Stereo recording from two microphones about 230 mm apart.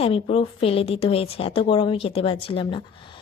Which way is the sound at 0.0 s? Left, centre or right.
Left.